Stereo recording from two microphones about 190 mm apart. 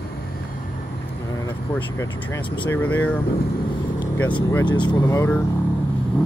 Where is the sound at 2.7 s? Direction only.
10° left (ahead or behind).